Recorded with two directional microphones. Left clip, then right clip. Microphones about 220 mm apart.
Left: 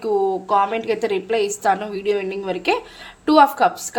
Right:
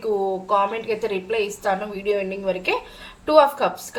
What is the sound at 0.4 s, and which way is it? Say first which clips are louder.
A woman's voice: left 2 dB; 50° left (ahead or behind).